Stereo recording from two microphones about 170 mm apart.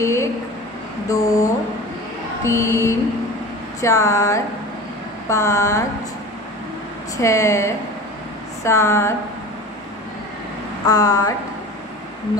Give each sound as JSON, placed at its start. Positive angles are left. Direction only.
{"t": 0.0, "sound": "speech", "side_deg": 15}
{"t": 2.4, "sound": "mantra", "side_deg": 15}
{"t": 7.2, "sound": "mantra", "side_deg": 15}
{"t": 10.9, "sound": "speech", "side_deg": 20}